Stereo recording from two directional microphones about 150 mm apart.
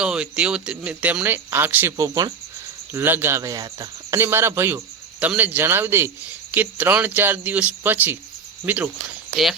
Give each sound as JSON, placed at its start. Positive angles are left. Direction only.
{"t": 0.0, "sound": "speech", "side_deg": -5}